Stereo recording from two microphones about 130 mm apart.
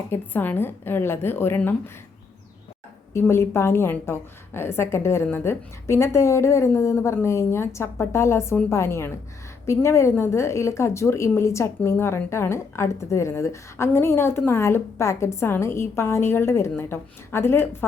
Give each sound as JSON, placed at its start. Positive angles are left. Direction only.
{"t": 0.1, "sound": "a woman's voice", "side_deg": 15}
{"t": 3.1, "sound": "a woman's voice", "side_deg": 20}